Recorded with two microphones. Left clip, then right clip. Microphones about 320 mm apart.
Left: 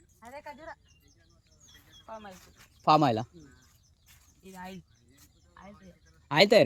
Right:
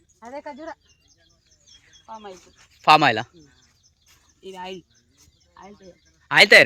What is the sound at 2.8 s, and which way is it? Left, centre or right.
Speech, centre.